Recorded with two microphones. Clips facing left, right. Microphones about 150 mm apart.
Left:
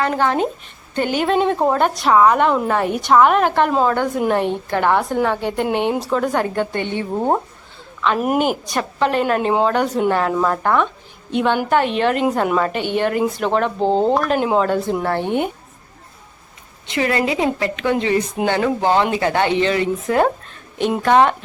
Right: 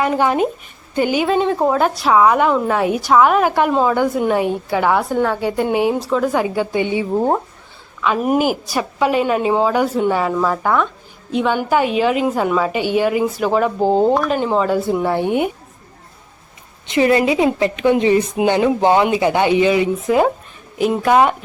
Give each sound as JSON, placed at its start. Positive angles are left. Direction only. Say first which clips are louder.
{"t": 0.0, "sound": "a woman's voice", "louder": "right 2 dB", "side_deg": -10}
{"t": 16.8, "sound": "a woman's voice", "louder": "right 5 dB", "side_deg": -20}